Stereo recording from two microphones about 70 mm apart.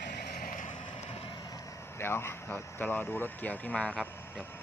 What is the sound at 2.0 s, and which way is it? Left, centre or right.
Speech, left.